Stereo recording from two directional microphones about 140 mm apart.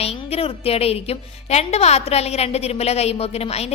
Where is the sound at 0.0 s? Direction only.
45° left (ahead or behind).